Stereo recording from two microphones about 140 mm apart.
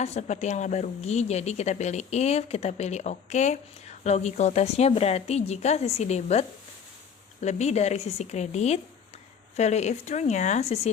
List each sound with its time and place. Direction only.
0.0 s a woman's voice: 55° left (ahead or behind)
7.4 s a woman's voice: 55° left (ahead or behind)